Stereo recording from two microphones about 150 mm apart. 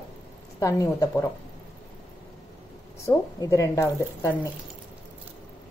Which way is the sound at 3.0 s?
20° left (ahead or behind).